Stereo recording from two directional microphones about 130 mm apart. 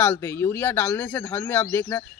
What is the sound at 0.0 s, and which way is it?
Speech, 15° left (ahead or behind).